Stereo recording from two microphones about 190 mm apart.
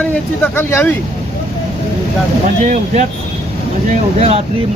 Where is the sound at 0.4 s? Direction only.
10° left (ahead or behind).